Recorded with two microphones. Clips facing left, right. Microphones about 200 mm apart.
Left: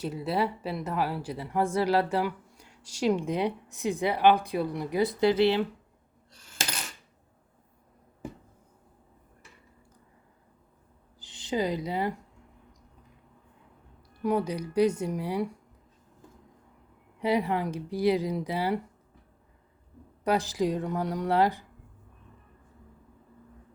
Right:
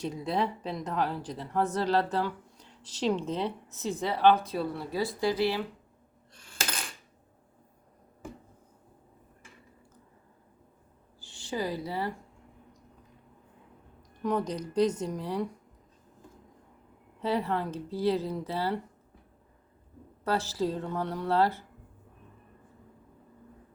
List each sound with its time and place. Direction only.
0.0 s a woman's voice: 5° left (ahead or behind); by 5.6 s 25° left (ahead or behind)
11.2 s a woman's voice: 20° left (ahead or behind)
14.2 s a woman's voice: 10° left (ahead or behind)
17.2 s a woman's voice: 10° left (ahead or behind)
20.2 s a woman's voice: 15° left (ahead or behind)